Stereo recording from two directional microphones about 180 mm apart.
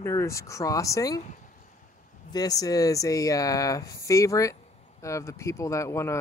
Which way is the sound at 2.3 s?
20° left (ahead or behind).